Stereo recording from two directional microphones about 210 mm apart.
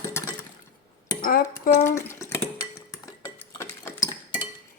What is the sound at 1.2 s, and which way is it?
Speech, 45° left (ahead or behind).